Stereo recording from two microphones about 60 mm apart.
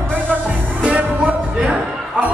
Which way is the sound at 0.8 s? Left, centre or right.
Right.